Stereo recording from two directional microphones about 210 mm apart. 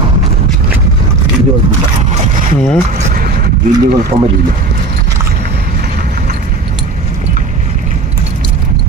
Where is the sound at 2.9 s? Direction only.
40° right (ahead or behind).